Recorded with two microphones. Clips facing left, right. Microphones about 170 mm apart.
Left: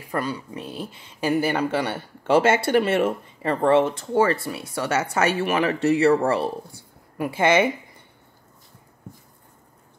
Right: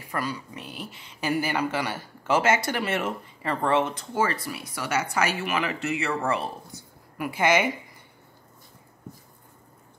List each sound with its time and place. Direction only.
0.1 s speech: 30° left (ahead or behind)